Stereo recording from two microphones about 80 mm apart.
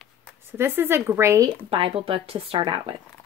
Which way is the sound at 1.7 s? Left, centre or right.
Right.